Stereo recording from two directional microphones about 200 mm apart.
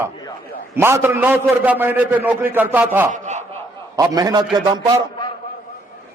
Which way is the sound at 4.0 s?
15° right (ahead or behind).